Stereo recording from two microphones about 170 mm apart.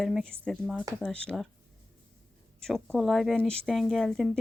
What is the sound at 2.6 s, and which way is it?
Speech, 5° left (ahead or behind).